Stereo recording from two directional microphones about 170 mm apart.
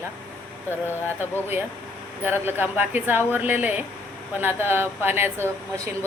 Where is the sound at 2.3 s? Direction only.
10° right (ahead or behind).